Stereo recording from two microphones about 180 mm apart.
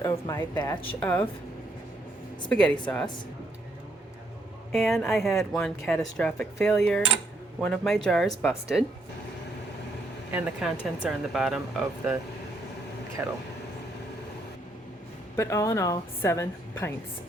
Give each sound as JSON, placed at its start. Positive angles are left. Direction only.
{"t": 0.0, "sound": "speech", "side_deg": 20}
{"t": 0.9, "sound": "a woman's voice", "side_deg": 10}
{"t": 2.5, "sound": "speech", "side_deg": 5}
{"t": 4.7, "sound": "speech", "side_deg": 0}
{"t": 10.3, "sound": "speech", "side_deg": -5}
{"t": 13.2, "sound": "speech", "side_deg": -10}
{"t": 15.4, "sound": "a woman's voice", "side_deg": 15}